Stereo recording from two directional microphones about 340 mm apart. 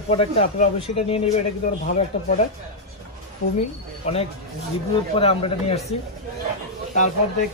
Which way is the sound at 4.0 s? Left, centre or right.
Centre.